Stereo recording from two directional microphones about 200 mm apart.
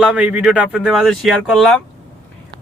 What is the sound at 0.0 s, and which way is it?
Speech, 5° right (ahead or behind).